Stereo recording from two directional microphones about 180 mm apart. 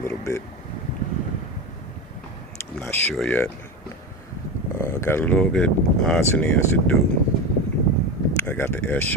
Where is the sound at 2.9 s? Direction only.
10° left (ahead or behind).